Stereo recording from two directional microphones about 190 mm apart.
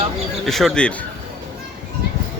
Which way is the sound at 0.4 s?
Centre (ahead or behind).